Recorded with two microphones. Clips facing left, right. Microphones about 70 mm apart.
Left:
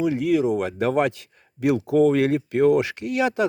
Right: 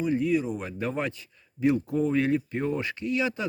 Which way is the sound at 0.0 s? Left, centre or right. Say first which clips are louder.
Left 5 dB; left.